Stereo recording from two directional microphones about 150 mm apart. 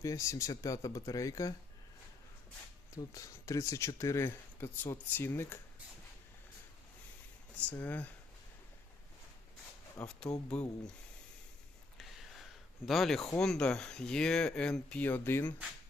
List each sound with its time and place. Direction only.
0.0 s speech: 20° left (ahead or behind)
2.9 s speech: 20° left (ahead or behind)
7.7 s speech: 10° left (ahead or behind)
10.0 s speech: 5° left (ahead or behind)
11.9 s a sound: centre (ahead or behind)
13.4 s speech: 5° left (ahead or behind)